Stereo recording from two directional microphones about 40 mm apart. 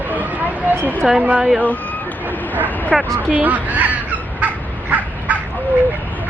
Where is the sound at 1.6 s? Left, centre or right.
Left.